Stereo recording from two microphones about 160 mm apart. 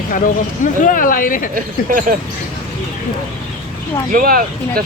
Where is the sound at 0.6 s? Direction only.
55° left (ahead or behind).